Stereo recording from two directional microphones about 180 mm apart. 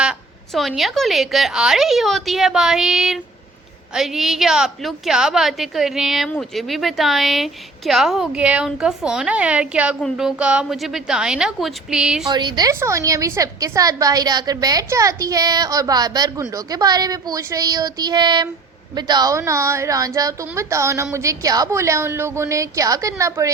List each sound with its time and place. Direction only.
0.0 s a woman's voice: centre (ahead or behind)
12.3 s a woman's voice: 25° right (ahead or behind)